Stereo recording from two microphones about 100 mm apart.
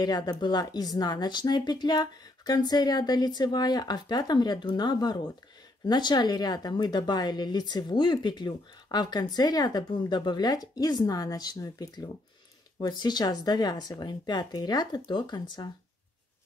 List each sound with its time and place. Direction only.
0.0 s speech: 45° left (ahead or behind)